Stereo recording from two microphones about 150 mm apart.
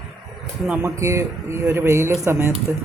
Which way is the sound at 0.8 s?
20° right (ahead or behind).